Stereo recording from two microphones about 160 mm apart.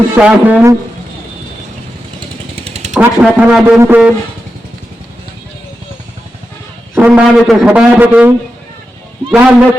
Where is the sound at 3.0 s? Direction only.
10° right (ahead or behind).